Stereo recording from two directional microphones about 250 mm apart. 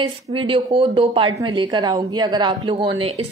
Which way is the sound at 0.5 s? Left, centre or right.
Right.